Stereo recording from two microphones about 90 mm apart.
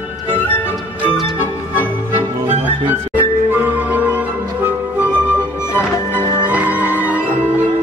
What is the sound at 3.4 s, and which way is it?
Music, 20° right (ahead or behind).